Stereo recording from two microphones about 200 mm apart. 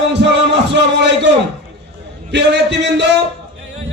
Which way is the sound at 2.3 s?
60° right (ahead or behind).